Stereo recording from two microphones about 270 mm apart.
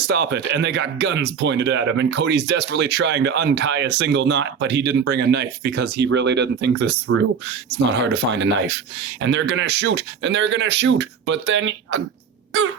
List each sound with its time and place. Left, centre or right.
0.0 s speech: right
8.0 s speech: right